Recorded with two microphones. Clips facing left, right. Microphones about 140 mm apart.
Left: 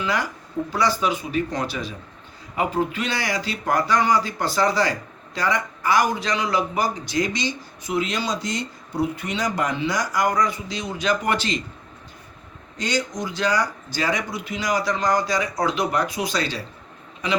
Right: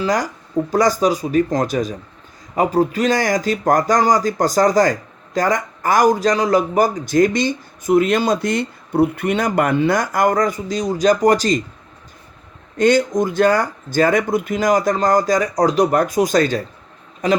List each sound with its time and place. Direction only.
0.0 s speech: 40° right (ahead or behind)
12.7 s speech: 55° right (ahead or behind)